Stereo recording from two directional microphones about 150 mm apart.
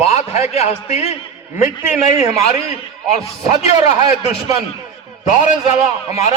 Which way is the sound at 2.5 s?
45° left (ahead or behind).